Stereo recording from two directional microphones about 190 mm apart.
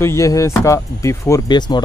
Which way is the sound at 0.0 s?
15° left (ahead or behind).